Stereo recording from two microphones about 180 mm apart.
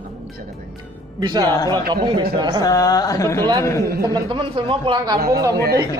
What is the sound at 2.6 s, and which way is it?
Speech, 20° left (ahead or behind).